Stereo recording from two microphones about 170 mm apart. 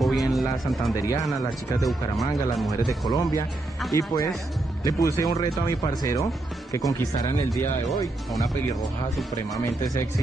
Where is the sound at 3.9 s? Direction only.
20° left (ahead or behind).